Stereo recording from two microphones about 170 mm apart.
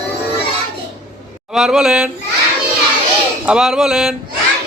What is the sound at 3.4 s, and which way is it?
Speech, 5° right (ahead or behind).